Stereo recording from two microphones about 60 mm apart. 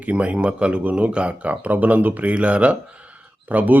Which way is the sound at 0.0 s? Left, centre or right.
Right.